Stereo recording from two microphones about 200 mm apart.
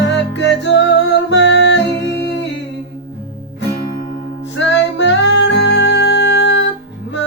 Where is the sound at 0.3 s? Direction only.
65° left (ahead or behind).